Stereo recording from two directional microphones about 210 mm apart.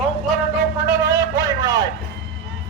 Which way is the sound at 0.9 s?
15° right (ahead or behind).